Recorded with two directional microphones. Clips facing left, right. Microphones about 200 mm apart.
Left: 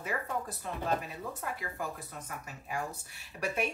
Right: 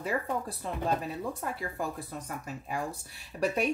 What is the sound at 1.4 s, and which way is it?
Speech, 35° right (ahead or behind).